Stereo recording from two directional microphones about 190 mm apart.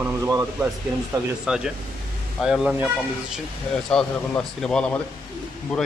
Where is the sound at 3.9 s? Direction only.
5° left (ahead or behind).